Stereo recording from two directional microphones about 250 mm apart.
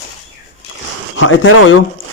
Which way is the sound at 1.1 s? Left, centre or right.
Left.